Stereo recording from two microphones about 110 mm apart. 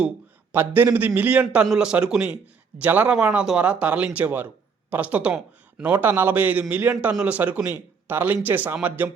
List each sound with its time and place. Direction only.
0.5 s a man's voice: 20° right (ahead or behind)
5.9 s a man's voice: 20° right (ahead or behind)